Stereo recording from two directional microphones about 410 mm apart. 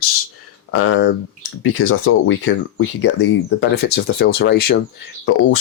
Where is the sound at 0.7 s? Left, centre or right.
Left.